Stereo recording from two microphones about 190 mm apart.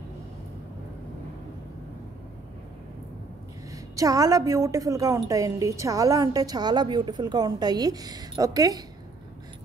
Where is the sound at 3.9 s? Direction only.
15° right (ahead or behind).